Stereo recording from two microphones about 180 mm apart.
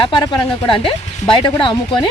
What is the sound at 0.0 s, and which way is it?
Speech, 25° left (ahead or behind).